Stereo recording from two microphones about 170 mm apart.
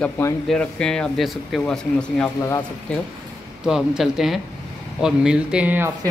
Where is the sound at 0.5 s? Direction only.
5° left (ahead or behind).